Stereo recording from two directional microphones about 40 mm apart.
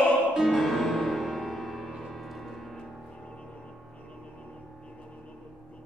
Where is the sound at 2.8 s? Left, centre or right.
Left.